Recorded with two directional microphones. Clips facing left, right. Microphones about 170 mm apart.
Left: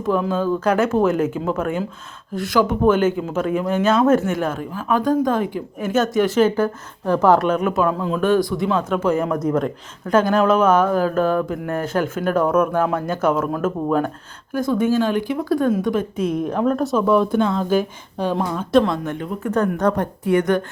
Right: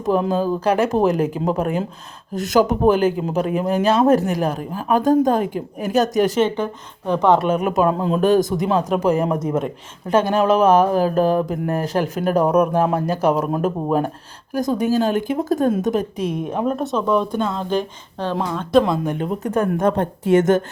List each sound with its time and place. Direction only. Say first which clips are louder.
0.0 s speech: right 1 dB; 40° right (ahead or behind)
6.4 s a woman's voice: left 3 dB; centre (ahead or behind)
7.7 s speech: right 2 dB; 35° right (ahead or behind)
8.2 s speech: right 1 dB; 40° right (ahead or behind)
9.3 s speech: left 1 dB; 10° right (ahead or behind)
10.1 s speech: even; 30° right (ahead or behind)
13.4 s speech: right 1 dB; 15° right (ahead or behind)
14.5 s speech: even; 40° right (ahead or behind)
16.2 s speech: left 2 dB; 20° right (ahead or behind)
16.6 s a woman's voice: left 3 dB; centre (ahead or behind)
17.2 s speech: left 3 dB; 10° right (ahead or behind)
17.7 s speech: left 3 dB; 10° left (ahead or behind)
18.8 s speech: right 1 dB; 5° right (ahead or behind)
19.2 s speech: left 3 dB; 25° right (ahead or behind)